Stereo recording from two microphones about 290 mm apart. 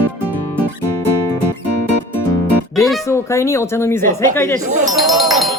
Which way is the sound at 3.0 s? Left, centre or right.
Centre.